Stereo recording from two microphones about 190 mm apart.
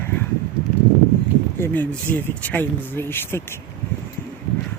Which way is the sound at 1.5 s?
10° left (ahead or behind).